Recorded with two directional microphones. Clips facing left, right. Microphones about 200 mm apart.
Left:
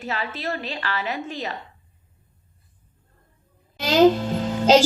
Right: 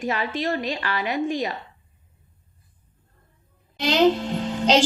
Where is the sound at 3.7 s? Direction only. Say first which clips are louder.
Left 3 dB; 45° left (ahead or behind).